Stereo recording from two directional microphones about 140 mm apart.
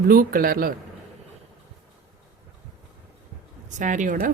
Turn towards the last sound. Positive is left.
turn(degrees=-70)  # may be behind; listen again after turning